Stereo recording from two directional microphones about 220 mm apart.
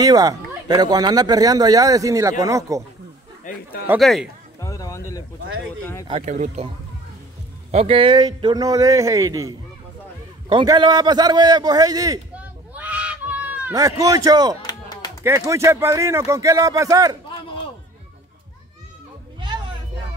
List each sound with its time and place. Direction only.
0.0 s speech: 15° right (ahead or behind)
3.4 s a sound: 35° left (ahead or behind)
3.8 s speech: 5° right (ahead or behind)
4.6 s a sound: 15° left (ahead or behind)
6.0 s speech: 30° right (ahead or behind)
7.7 s speech: 25° right (ahead or behind)
12.4 s fowl: 5° right (ahead or behind)
14.6 s a sound: 15° left (ahead or behind)
15.2 s speech: 15° right (ahead or behind)